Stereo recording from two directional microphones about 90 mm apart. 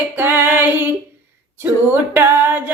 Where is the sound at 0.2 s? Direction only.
25° right (ahead or behind).